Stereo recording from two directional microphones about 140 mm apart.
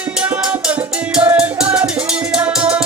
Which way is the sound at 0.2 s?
10° right (ahead or behind).